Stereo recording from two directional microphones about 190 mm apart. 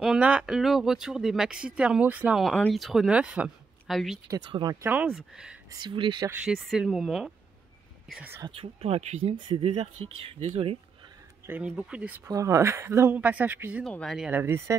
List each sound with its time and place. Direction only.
0.0 s speech: 5° right (ahead or behind)
4.3 s speech: 25° right (ahead or behind)
4.8 s speech: 5° right (ahead or behind)
5.7 s speech: 25° right (ahead or behind)
6.4 s speech: 5° right (ahead or behind)
8.4 s speech: 25° right (ahead or behind)
11.4 s speech: 10° right (ahead or behind)
13.8 s speech: 5° left (ahead or behind); by 14.8 s 15° right (ahead or behind)